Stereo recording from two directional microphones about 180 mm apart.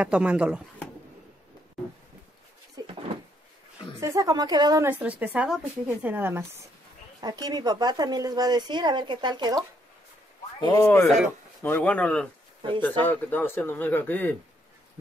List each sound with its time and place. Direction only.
0.0 s a woman's voice: 5° right (ahead or behind)
4.0 s a woman's voice: 20° right (ahead or behind)
7.2 s speech: 20° right (ahead or behind)
10.6 s speech: 20° left (ahead or behind)